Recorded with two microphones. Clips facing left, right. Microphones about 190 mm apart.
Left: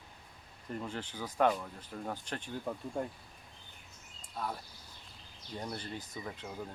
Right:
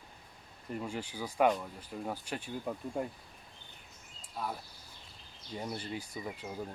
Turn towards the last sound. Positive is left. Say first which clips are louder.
# right 2 dB
turn(degrees=-10)  # may be behind; listen again after turning